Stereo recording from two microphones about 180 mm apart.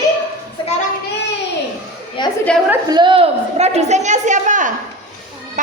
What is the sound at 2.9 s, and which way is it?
A woman's voice, 25° right (ahead or behind).